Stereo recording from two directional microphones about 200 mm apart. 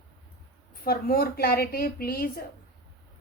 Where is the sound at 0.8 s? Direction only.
50° left (ahead or behind).